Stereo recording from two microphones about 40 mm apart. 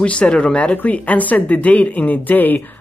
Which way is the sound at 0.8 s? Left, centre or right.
Left.